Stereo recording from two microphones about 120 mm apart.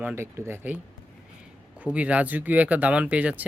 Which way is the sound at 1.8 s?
10° right (ahead or behind).